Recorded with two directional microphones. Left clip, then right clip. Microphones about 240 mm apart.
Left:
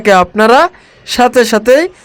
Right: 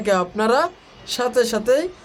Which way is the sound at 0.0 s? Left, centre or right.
Left.